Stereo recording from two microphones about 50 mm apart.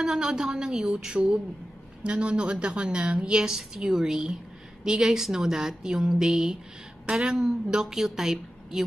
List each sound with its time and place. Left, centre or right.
0.0 s a woman's voice: centre